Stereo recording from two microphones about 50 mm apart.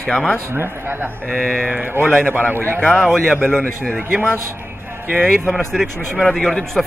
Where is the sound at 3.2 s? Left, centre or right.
Centre.